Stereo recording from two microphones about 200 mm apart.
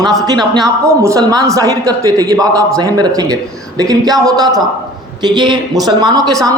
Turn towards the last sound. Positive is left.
turn(degrees=-15)  # may be behind; listen again after turning